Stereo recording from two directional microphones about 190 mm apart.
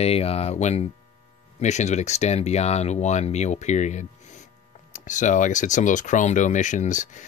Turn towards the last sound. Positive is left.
turn(degrees=40)  # may be behind; listen again after turning